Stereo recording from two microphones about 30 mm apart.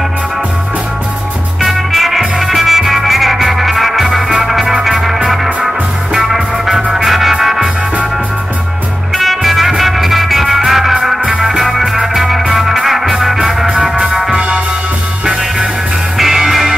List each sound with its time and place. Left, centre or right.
1.6 s music: centre
9.1 s music: centre
11.6 s music: centre
14.3 s music: right
16.2 s music: centre